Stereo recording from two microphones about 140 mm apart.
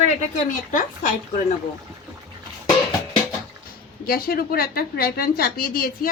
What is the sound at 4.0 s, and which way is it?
A woman's voice, 90° left.